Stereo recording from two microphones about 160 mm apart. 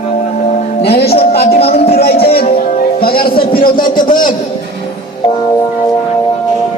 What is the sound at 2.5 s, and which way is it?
Music, 60° left (ahead or behind).